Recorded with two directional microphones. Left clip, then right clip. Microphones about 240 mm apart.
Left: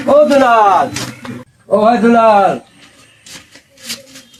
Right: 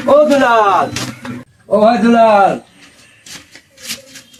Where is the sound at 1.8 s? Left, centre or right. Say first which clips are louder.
Even; centre.